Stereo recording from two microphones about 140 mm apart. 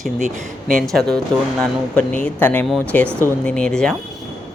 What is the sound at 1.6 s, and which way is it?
A woman's voice, 10° left (ahead or behind).